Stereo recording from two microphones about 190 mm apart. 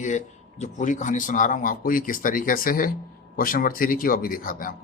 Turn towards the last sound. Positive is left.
turn(degrees=50)  # may be behind; listen again after turning